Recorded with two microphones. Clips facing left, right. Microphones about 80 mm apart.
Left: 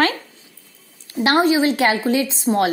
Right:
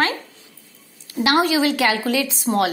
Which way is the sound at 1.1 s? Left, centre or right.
Left.